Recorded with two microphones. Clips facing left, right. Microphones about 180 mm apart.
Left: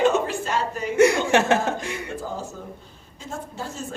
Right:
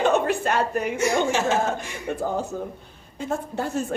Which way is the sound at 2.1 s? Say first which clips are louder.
Right 5 dB; 60° right (ahead or behind).